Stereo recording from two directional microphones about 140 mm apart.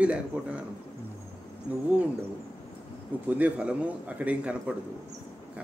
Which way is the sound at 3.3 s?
10° right (ahead or behind).